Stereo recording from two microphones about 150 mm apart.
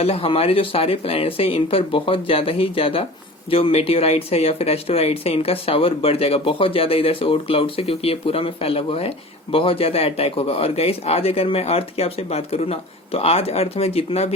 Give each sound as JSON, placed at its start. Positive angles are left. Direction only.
{"t": 0.0, "sound": "speech", "side_deg": 40}